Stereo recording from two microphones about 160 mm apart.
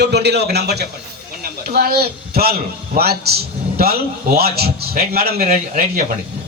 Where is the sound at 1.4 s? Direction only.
70° right (ahead or behind).